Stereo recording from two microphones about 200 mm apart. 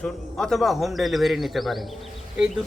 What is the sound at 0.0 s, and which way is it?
Speech, 5° left (ahead or behind).